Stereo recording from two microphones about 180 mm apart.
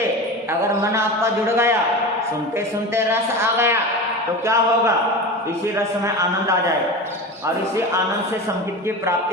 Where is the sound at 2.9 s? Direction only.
15° right (ahead or behind).